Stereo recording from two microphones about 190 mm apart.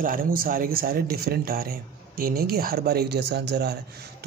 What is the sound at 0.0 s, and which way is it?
A man's voice, 45° right (ahead or behind).